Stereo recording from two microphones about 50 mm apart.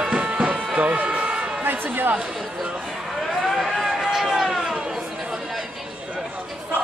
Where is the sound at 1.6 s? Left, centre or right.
Right.